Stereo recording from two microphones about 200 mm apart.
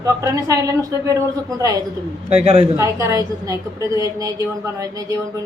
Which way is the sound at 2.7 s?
15° right (ahead or behind).